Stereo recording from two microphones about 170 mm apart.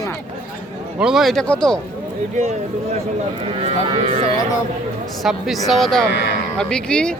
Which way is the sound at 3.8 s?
35° right (ahead or behind).